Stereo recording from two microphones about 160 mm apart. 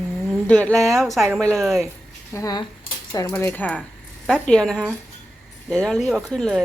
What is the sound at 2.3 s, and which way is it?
A woman's voice, 20° left (ahead or behind).